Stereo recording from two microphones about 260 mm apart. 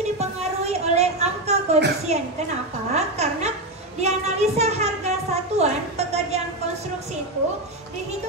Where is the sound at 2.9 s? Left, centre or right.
Right.